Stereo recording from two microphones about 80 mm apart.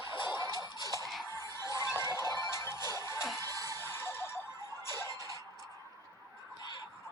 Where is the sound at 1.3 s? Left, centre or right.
Left.